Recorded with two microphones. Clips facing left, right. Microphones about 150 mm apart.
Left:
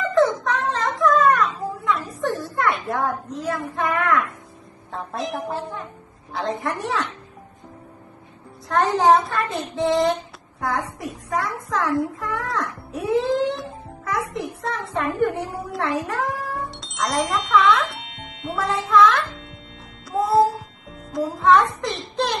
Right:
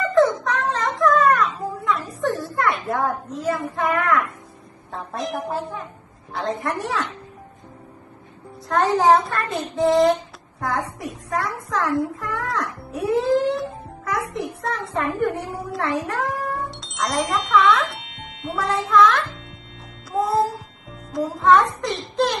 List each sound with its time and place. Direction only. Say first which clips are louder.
0.1 s a sound: right 1 dB; centre (ahead or behind)
2.2 s children playing: right 1 dB; centre (ahead or behind)
2.9 s child singing: right 1 dB; centre (ahead or behind)
8.6 s child singing: even; centre (ahead or behind)
10.7 s a child's voice: right 1 dB; centre (ahead or behind)
21.1 s child singing: even; centre (ahead or behind)
22.1 s a child's voice: right 3 dB; centre (ahead or behind)